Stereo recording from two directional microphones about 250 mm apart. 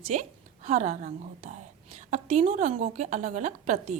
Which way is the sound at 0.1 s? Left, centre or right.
Right.